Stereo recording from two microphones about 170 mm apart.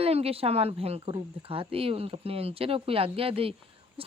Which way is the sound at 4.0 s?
35° right (ahead or behind).